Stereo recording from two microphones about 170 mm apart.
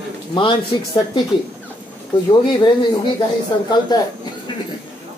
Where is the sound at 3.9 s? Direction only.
25° left (ahead or behind).